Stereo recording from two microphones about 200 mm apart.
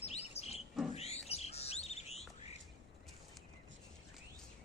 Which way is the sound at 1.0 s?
30° left (ahead or behind).